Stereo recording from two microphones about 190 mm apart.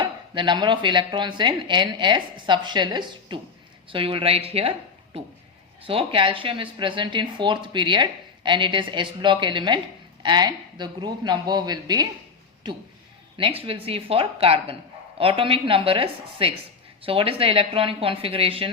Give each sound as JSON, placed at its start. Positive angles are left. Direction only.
{"t": 0.0, "sound": "a woman's voice", "side_deg": -25}
{"t": 5.8, "sound": "speech", "side_deg": -30}
{"t": 13.3, "sound": "speech", "side_deg": -30}